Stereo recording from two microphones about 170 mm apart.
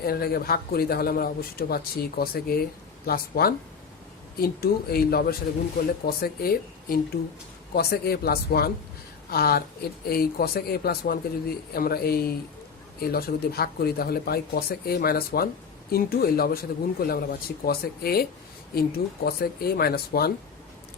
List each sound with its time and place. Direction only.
0.0 s a man's voice: 65° left (ahead or behind)